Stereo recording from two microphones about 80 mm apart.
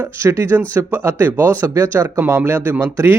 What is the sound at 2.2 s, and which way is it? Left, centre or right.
Speech, right.